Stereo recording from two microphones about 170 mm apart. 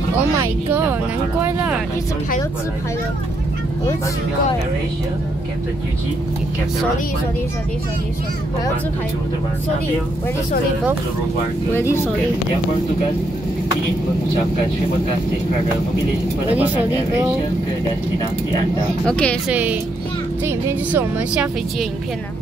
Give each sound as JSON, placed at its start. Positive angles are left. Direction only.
{"t": 11.7, "sound": "speech", "side_deg": 15}
{"t": 19.0, "sound": "speech", "side_deg": 5}
{"t": 19.5, "sound": "speech", "side_deg": -10}